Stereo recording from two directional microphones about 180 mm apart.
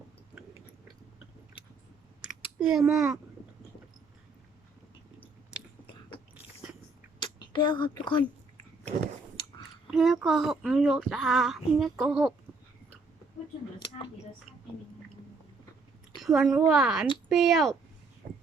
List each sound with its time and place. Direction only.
2.6 s speech: 5° right (ahead or behind)
7.5 s speech: 25° left (ahead or behind)
9.8 s speech: centre (ahead or behind)
16.1 s speech: centre (ahead or behind)